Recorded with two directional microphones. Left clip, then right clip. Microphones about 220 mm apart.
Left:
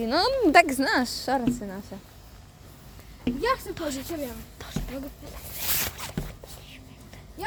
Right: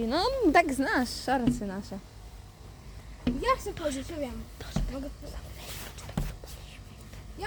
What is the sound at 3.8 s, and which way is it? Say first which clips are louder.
Speech: left 1 dB; 5° left (ahead or behind).